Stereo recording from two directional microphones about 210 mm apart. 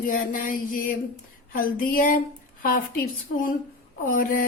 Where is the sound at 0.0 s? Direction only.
40° left (ahead or behind).